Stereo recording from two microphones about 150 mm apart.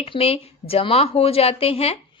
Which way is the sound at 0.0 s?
40° left (ahead or behind).